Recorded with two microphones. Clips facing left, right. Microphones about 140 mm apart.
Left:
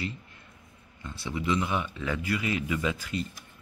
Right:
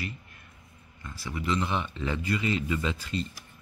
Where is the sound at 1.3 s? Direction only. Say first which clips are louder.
Left 1 dB; 15° left (ahead or behind).